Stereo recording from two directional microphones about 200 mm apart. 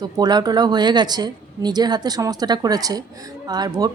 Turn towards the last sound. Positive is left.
turn(degrees=-20)  # may be behind; listen again after turning